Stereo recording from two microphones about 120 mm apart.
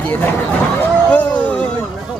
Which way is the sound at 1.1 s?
10° left (ahead or behind).